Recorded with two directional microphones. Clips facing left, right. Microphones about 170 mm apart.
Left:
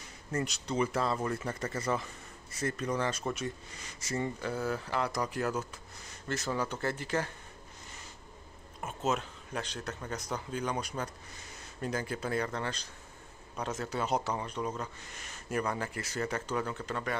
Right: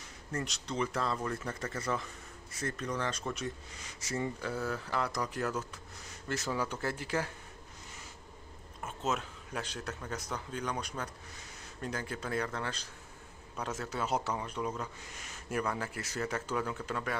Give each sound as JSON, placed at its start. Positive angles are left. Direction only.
{"t": 0.3, "sound": "speech", "side_deg": 5}
{"t": 6.2, "sound": "speech", "side_deg": -5}
{"t": 9.0, "sound": "speech", "side_deg": 0}